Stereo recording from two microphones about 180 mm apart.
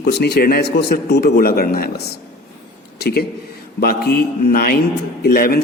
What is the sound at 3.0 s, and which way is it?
A man's voice, 65° left (ahead or behind).